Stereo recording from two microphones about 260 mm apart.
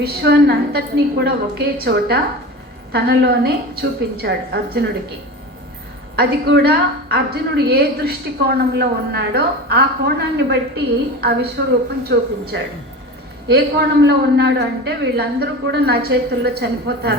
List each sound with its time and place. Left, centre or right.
0.0 s a woman's voice: right
6.1 s a woman's voice: right